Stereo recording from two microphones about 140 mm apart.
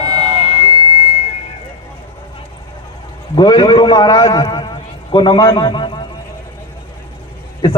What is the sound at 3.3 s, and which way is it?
A man's voice, 35° left (ahead or behind).